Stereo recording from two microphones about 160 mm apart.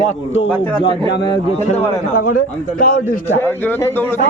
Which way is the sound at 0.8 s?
30° left (ahead or behind).